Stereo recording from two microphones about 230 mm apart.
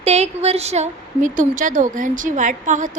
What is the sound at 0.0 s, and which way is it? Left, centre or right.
Speech, right.